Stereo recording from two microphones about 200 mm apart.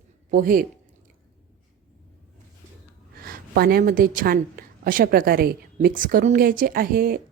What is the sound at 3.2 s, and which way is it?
Speech, 50° right (ahead or behind).